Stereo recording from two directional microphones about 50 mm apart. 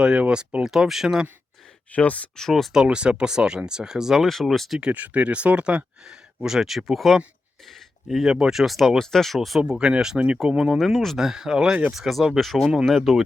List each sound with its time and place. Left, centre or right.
0.0 s speech: centre
1.9 s speech: left
2.3 s speech: centre
2.8 s speech: right
4.3 s speech: centre
4.8 s speech: right; by 7.2 s centre
7.6 s a sound: centre
8.0 s speech: centre
9.6 s speech: centre
10.7 s speech: centre